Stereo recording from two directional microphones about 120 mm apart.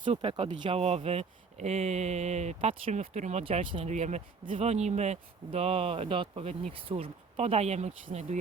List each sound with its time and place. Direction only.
0.0 s speech: 50° right (ahead or behind); by 3.4 s 70° right (ahead or behind)
3.4 s speech: 50° right (ahead or behind)
3.8 s speech: 70° right (ahead or behind)